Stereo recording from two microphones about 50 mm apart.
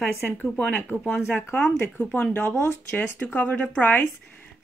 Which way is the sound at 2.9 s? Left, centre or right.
Left.